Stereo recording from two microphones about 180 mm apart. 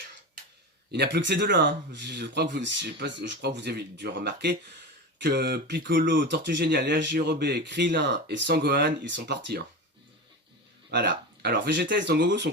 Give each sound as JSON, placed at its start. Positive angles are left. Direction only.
{"t": 0.9, "sound": "speech", "side_deg": -70}
{"t": 10.9, "sound": "speech", "side_deg": -70}